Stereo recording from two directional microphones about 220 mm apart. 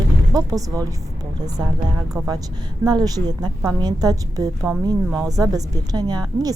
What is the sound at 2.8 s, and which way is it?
A woman's voice, 15° right (ahead or behind).